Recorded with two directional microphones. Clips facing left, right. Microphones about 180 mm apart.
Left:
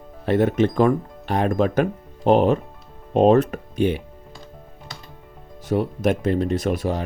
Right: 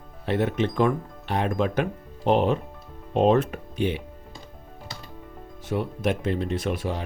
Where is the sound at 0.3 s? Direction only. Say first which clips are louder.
Left 6 dB; 45° left (ahead or behind).